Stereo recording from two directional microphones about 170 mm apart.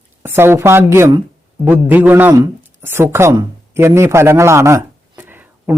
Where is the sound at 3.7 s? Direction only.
15° right (ahead or behind).